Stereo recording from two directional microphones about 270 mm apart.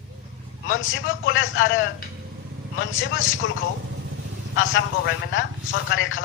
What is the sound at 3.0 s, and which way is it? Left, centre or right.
Speech, left.